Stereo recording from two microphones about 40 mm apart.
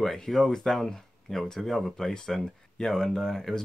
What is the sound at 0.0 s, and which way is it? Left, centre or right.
Speech, centre.